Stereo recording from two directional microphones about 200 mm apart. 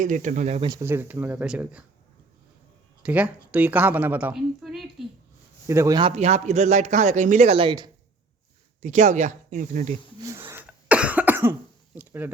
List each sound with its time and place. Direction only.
0.0 s a man's voice: 40° right (ahead or behind)
0.7 s a woman's voice: 15° right (ahead or behind)
3.0 s a woman's voice: 5° right (ahead or behind)
5.6 s a man's voice: 15° right (ahead or behind)
8.8 s a man's voice: 35° right (ahead or behind)
10.2 s cough: 10° right (ahead or behind)
11.9 s speech: 10° right (ahead or behind)